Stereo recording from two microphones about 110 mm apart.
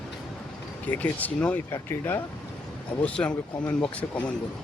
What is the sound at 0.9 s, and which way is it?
Speech, 15° left (ahead or behind).